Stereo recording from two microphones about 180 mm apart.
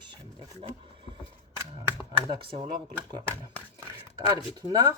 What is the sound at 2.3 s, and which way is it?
Speech, 30° right (ahead or behind).